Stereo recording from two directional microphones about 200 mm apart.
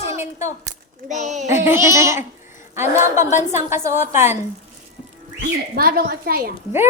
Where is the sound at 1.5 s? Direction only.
10° right (ahead or behind).